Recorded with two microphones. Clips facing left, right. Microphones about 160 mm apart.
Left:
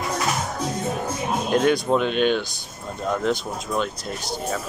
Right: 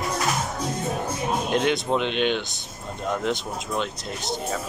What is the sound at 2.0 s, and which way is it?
Speech, 45° left (ahead or behind).